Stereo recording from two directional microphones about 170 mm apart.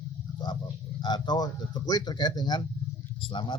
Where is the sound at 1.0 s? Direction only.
25° left (ahead or behind).